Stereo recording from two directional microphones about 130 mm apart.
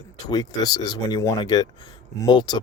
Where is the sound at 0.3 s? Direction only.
30° left (ahead or behind).